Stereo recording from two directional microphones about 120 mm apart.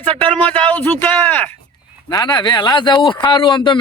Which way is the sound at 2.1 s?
35° left (ahead or behind).